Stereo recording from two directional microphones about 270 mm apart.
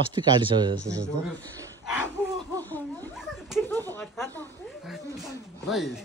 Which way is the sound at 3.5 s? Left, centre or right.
Centre.